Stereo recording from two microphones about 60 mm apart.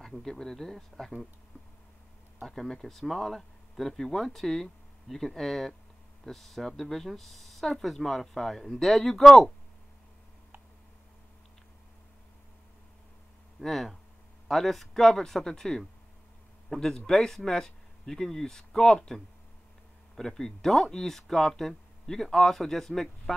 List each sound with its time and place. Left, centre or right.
0.0 s speech: centre
2.4 s speech: centre
13.6 s speech: centre